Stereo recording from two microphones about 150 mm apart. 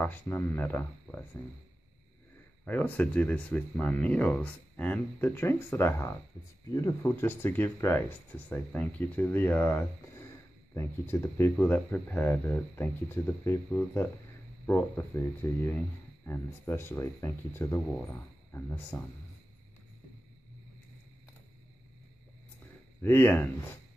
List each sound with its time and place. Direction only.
0.0 s speech: 15° left (ahead or behind)
2.6 s speech: 10° left (ahead or behind)
23.0 s speech: 15° left (ahead or behind)